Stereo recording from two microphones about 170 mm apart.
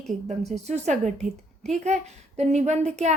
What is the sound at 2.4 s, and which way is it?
Speech, 40° right (ahead or behind).